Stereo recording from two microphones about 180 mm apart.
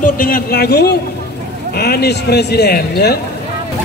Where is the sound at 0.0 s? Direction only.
55° left (ahead or behind).